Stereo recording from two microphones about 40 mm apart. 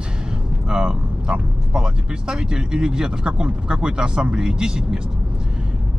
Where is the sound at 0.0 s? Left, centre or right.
Right.